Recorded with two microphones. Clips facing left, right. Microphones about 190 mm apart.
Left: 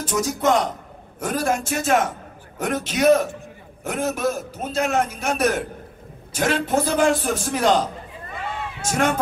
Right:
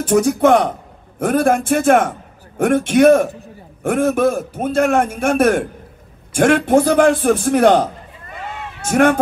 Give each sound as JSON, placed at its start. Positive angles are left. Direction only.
{"t": 0.0, "sound": "a man's voice", "side_deg": -60}